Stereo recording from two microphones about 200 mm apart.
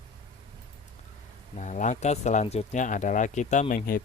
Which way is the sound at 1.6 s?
35° left (ahead or behind).